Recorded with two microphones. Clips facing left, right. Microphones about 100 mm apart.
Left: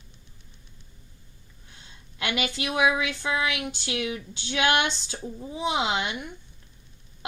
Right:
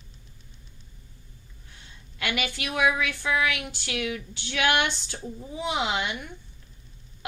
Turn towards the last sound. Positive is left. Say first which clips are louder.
# left 1 dB
turn(degrees=20)  # may be behind; listen again after turning